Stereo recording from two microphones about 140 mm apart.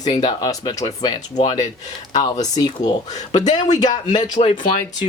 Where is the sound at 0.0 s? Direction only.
30° left (ahead or behind).